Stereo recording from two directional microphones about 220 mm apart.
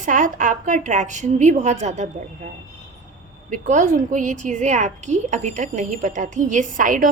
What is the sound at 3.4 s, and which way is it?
A woman's voice, 35° right (ahead or behind).